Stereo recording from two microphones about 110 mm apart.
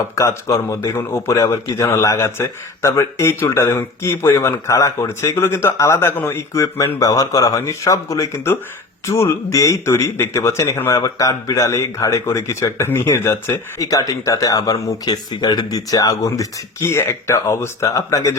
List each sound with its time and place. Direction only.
0.2 s speech: 30° left (ahead or behind)